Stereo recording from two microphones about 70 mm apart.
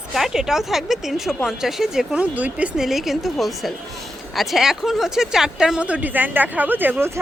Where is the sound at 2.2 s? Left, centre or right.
Right.